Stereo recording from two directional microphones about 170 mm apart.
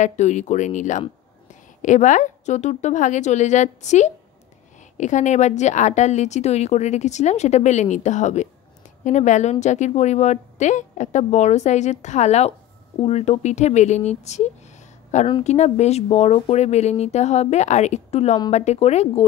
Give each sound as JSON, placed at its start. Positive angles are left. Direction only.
{"t": 0.0, "sound": "a woman's voice", "side_deg": 45}